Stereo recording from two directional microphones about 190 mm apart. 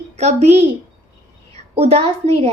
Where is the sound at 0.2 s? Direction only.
35° right (ahead or behind).